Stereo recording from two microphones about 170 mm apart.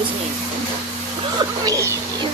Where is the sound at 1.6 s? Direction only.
20° right (ahead or behind).